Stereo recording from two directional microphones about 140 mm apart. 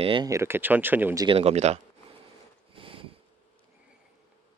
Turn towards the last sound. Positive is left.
turn(degrees=-40)  # may be behind; listen again after turning